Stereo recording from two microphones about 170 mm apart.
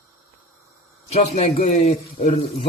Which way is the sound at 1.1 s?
40° left (ahead or behind).